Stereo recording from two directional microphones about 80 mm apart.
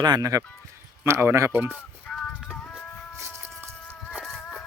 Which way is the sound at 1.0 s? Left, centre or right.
Right.